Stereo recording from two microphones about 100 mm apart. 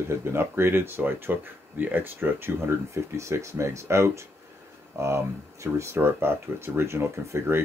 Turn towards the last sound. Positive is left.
turn(degrees=-25)  # may be behind; listen again after turning